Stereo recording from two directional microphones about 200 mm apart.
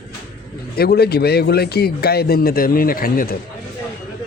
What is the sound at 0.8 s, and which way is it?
Speech, 50° left (ahead or behind).